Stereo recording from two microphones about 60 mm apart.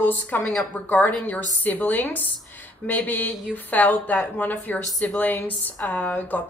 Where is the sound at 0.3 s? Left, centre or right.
Left.